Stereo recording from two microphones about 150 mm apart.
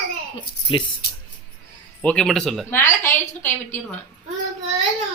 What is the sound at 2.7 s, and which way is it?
A woman's voice, 15° left (ahead or behind).